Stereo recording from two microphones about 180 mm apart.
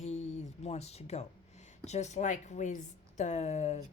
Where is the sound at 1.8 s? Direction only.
40° left (ahead or behind).